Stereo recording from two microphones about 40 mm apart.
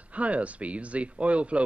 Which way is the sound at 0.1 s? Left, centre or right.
Right.